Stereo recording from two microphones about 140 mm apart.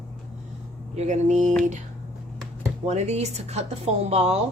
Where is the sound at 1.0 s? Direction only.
55° right (ahead or behind).